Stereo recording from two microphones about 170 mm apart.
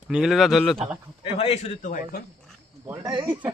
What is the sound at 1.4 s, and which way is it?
Speech, 40° left (ahead or behind).